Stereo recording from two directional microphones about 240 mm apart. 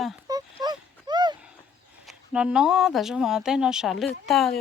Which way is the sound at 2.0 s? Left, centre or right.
Centre.